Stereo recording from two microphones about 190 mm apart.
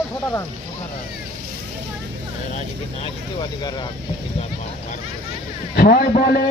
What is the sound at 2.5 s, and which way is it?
Speech, 35° left (ahead or behind).